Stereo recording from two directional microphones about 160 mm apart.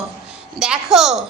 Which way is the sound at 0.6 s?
5° right (ahead or behind).